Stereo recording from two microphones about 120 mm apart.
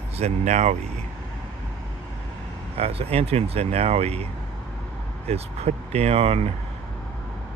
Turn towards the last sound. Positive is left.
turn(degrees=-55)  # may be behind; listen again after turning